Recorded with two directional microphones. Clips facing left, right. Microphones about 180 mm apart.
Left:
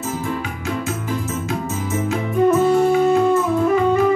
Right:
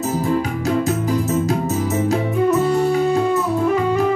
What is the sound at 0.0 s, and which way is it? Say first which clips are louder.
Music: right 5 dB; 40° right (ahead or behind).